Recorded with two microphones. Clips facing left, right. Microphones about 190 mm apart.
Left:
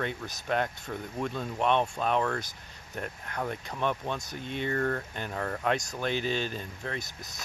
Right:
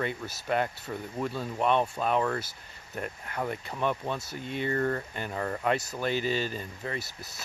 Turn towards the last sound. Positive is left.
turn(degrees=-5)  # may be behind; listen again after turning